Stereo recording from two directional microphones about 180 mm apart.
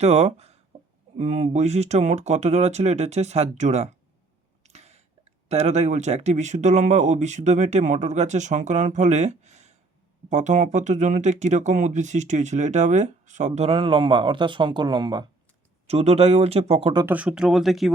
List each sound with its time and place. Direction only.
0.0 s speech: 35° right (ahead or behind)
15.9 s speech: 35° right (ahead or behind)
17.1 s speech: 10° right (ahead or behind)